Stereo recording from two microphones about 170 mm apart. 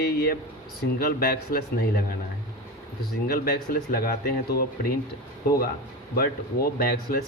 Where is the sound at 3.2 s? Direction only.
60° left (ahead or behind).